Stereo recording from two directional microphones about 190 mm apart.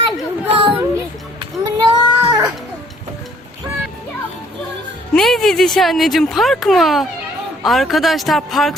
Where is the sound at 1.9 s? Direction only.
20° right (ahead or behind).